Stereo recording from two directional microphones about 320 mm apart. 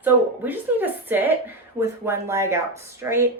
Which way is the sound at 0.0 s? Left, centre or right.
Centre.